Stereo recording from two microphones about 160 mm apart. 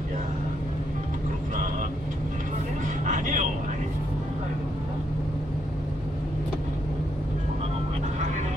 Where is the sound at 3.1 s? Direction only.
50° right (ahead or behind).